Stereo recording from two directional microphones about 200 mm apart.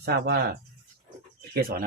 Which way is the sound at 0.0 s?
55° right (ahead or behind).